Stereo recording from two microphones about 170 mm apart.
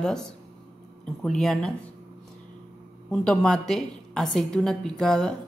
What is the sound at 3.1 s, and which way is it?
A man's voice, centre (ahead or behind).